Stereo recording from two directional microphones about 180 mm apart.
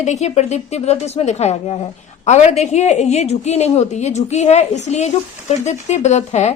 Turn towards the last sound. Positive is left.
turn(degrees=40)  # may be behind; listen again after turning